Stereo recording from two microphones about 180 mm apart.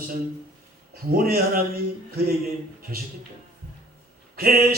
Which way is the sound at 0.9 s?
55° right (ahead or behind).